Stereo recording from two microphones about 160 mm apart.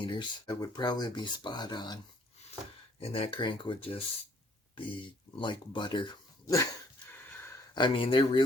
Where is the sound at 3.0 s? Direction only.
35° left (ahead or behind).